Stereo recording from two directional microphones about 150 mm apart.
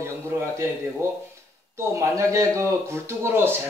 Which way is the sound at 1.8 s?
20° right (ahead or behind).